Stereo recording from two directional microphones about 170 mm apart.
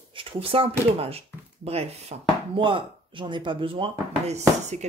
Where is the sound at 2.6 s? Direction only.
30° right (ahead or behind).